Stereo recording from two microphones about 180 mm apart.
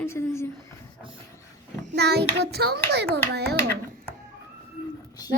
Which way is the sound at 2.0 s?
65° right (ahead or behind).